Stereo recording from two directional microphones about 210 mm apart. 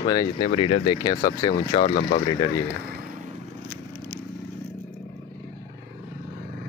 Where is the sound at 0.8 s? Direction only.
15° left (ahead or behind).